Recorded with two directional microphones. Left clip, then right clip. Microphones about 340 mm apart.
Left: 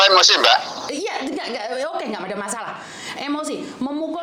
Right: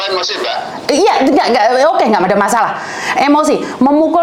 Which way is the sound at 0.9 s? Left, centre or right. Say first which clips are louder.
Right 19 dB; right.